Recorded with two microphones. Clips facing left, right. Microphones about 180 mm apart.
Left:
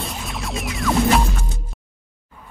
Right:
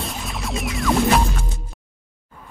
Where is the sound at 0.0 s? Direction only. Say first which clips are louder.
Even; centre (ahead or behind).